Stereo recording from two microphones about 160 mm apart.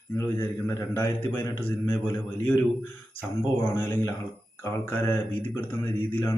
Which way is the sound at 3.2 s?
15° left (ahead or behind).